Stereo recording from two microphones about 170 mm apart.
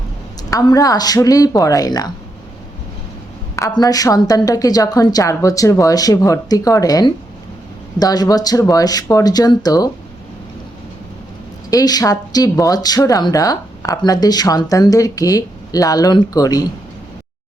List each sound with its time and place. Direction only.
0.5 s speech: 20° left (ahead or behind)
3.5 s speech: 20° left (ahead or behind)
11.7 s speech: 20° left (ahead or behind)